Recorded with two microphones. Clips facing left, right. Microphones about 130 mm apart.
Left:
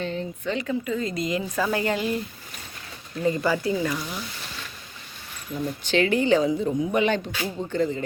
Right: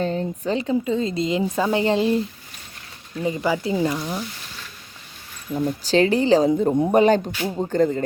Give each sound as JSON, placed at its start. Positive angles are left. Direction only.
{"t": 0.0, "sound": "a woman's voice", "side_deg": -40}
{"t": 3.2, "sound": "a woman's voice", "side_deg": -15}
{"t": 5.5, "sound": "speech", "side_deg": -35}
{"t": 6.5, "sound": "a man's voice", "side_deg": -50}
{"t": 7.7, "sound": "a man's voice", "side_deg": -45}